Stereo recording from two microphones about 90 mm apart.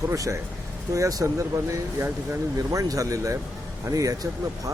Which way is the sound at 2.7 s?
40° right (ahead or behind).